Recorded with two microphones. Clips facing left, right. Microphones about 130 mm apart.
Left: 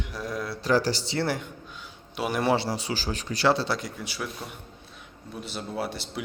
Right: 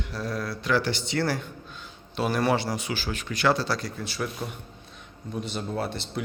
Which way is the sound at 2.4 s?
25° left (ahead or behind).